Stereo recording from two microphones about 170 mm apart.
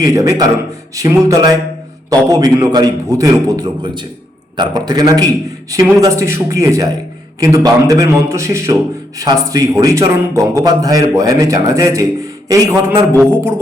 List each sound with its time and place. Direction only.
0.0 s a man's voice: 20° right (ahead or behind)